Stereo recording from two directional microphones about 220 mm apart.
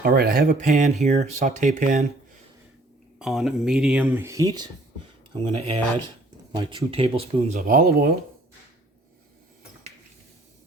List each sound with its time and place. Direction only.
0.0 s speech: 45° right (ahead or behind)
3.2 s speech: centre (ahead or behind); by 7.6 s 25° right (ahead or behind)
7.7 s speech: 45° right (ahead or behind)